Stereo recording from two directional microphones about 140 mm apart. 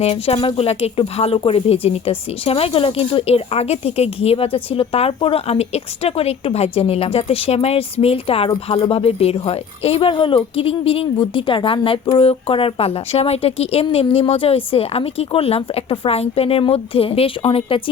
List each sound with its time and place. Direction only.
0.0 s speech: 45° left (ahead or behind)